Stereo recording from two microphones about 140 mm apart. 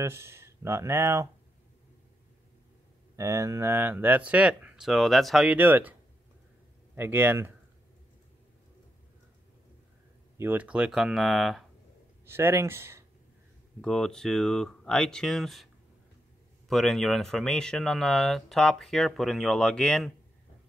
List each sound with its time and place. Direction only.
0.0 s speech: 20° right (ahead or behind)
3.2 s speech: 20° right (ahead or behind)
7.0 s speech: 15° right (ahead or behind)
10.3 s speech: 15° right (ahead or behind)
12.3 s speech: 15° right (ahead or behind)
13.7 s speech: 5° left (ahead or behind)